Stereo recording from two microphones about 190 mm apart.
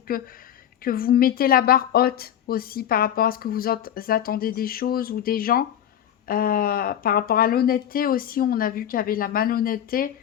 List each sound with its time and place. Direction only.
0.1 s a woman's voice: 50° left (ahead or behind)